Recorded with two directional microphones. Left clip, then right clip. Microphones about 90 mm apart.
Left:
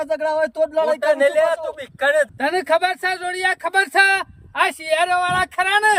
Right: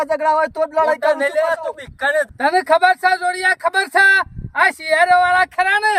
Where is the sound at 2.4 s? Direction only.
Centre (ahead or behind).